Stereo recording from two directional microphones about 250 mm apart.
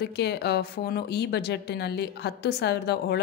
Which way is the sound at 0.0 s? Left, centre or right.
Left.